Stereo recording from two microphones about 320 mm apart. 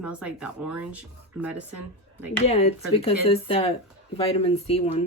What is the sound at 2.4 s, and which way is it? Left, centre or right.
Speech, centre.